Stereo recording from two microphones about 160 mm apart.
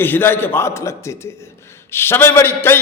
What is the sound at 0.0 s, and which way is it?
A man's voice, 15° left (ahead or behind).